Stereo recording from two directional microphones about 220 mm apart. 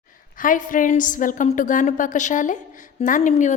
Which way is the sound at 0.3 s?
35° left (ahead or behind).